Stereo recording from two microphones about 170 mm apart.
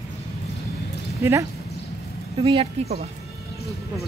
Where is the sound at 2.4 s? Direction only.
30° right (ahead or behind).